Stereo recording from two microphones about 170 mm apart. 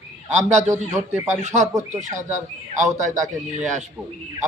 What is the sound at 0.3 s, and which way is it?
Speech, 45° right (ahead or behind).